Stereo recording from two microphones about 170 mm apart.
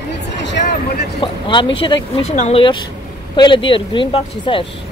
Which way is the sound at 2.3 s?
40° left (ahead or behind).